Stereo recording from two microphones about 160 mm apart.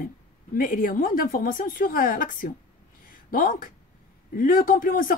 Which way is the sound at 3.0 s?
60° left (ahead or behind).